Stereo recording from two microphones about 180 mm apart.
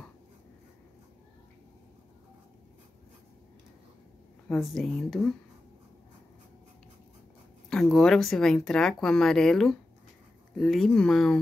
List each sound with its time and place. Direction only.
4.5 s speech: centre (ahead or behind)
7.7 s speech: 5° left (ahead or behind)